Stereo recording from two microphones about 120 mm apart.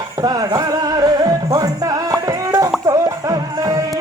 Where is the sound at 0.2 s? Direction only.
30° right (ahead or behind).